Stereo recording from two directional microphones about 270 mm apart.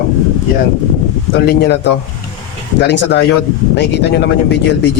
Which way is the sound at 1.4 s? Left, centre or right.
Left.